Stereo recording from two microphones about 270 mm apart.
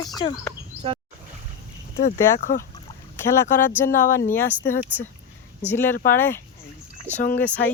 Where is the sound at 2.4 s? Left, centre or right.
Left.